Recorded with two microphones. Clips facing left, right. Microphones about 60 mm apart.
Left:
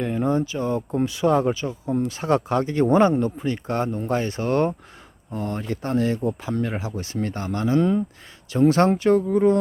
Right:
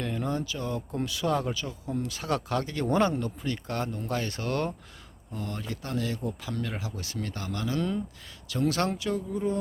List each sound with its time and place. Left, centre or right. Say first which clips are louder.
0.0 s speech: left 8 dB; left
9.3 s speech: left 11 dB; left